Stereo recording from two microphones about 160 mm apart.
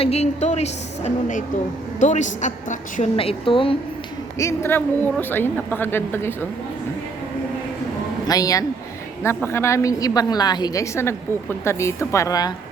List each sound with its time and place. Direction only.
0.0 s a woman's voice: 40° left (ahead or behind)
3.2 s speech: 35° left (ahead or behind)
4.4 s speech: 15° left (ahead or behind)
8.3 s a woman's voice: 20° left (ahead or behind)